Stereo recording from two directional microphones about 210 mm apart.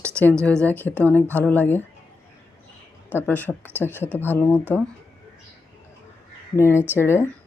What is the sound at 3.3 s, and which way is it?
Speech, 10° left (ahead or behind).